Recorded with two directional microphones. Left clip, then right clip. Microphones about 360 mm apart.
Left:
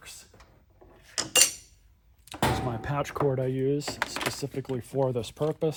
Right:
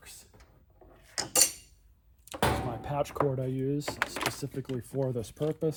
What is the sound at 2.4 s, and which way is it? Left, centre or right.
Thunk, centre.